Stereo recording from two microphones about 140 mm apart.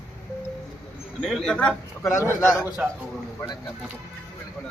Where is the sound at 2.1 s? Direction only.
20° left (ahead or behind).